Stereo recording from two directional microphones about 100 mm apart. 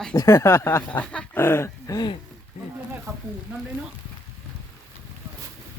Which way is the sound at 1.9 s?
40° left (ahead or behind).